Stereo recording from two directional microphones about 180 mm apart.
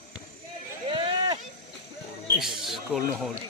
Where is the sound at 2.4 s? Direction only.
Centre (ahead or behind).